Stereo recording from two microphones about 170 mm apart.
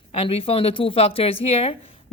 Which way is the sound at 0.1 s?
35° left (ahead or behind).